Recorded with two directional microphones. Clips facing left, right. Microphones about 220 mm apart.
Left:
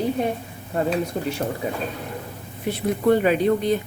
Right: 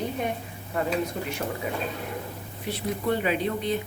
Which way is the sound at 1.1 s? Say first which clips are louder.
Left 6 dB; 35° left (ahead or behind).